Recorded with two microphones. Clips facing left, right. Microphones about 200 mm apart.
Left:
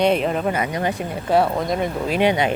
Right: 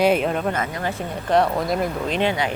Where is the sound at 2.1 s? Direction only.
20° left (ahead or behind).